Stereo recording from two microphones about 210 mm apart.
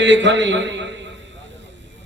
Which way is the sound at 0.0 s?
60° right (ahead or behind).